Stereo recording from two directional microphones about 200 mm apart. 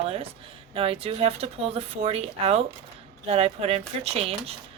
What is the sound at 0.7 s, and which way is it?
Speech, 30° right (ahead or behind).